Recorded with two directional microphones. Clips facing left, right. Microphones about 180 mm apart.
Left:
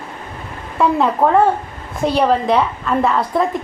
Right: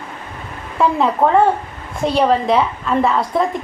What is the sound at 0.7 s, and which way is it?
A woman's voice, centre (ahead or behind).